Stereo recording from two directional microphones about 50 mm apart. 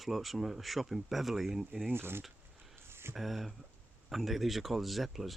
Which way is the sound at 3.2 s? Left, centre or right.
Centre.